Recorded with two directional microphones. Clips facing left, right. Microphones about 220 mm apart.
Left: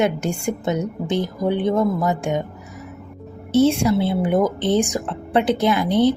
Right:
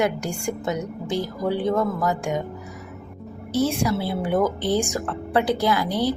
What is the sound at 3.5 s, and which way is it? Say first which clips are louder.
Speech: left 6 dB; 25° left (ahead or behind).